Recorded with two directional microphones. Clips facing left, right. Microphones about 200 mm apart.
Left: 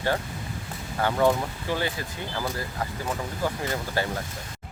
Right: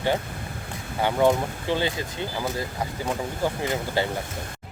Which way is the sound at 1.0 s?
20° right (ahead or behind).